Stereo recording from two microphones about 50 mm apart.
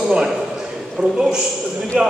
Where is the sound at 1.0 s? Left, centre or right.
Right.